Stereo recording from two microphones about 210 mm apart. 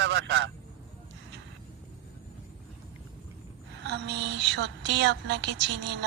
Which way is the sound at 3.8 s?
50° right (ahead or behind).